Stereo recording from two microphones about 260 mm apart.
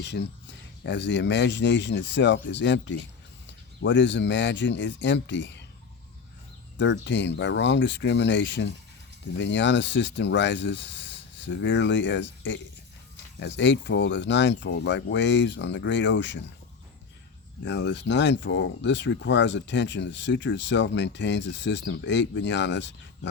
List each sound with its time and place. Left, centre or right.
0.0 s speech: left
6.7 s speech: left
17.6 s speech: left